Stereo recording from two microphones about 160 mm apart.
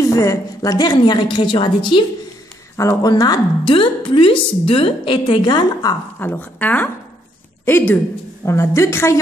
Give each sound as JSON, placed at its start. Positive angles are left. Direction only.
{"t": 0.0, "sound": "a woman's voice", "side_deg": 20}
{"t": 2.7, "sound": "a woman's voice", "side_deg": 20}
{"t": 6.2, "sound": "a woman's voice", "side_deg": 10}